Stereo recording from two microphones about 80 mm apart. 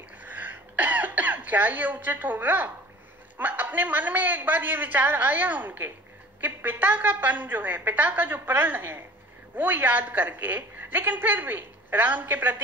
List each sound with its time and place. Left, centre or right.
0.2 s throat clearing: right
3.3 s a woman's voice: right